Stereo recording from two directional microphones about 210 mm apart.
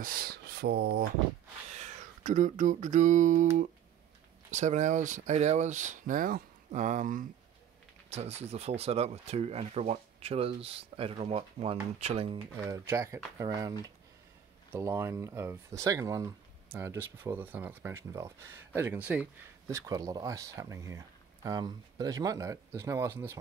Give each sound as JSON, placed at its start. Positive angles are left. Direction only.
{"t": 0.0, "sound": "speech", "side_deg": -45}
{"t": 1.7, "sound": "a sound", "side_deg": -35}
{"t": 4.5, "sound": "speech", "side_deg": -35}
{"t": 12.6, "sound": "speech", "side_deg": -15}